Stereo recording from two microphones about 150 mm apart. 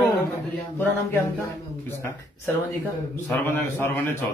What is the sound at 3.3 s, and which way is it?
Speech, 20° left (ahead or behind).